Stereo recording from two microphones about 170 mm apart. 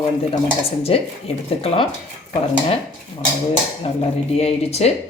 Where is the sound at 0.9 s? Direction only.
35° left (ahead or behind).